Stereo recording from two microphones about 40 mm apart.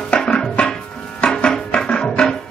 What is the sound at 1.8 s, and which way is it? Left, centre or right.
Music, left.